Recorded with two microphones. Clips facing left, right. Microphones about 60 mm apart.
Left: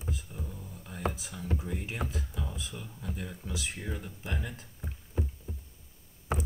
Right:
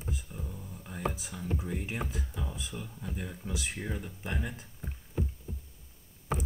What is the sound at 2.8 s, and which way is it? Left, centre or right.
Speech, centre.